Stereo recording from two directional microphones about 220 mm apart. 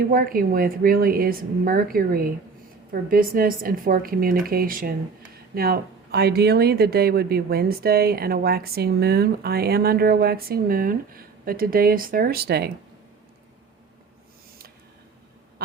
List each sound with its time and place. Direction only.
0.1 s speech: 40° right (ahead or behind)